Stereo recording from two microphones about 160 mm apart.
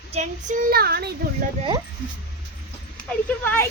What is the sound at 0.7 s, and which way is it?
Speech, 75° right (ahead or behind).